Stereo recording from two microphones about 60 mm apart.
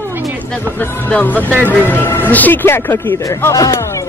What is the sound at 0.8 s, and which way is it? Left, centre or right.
Speech, left.